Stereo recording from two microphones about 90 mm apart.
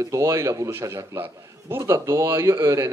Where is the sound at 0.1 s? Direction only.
30° right (ahead or behind).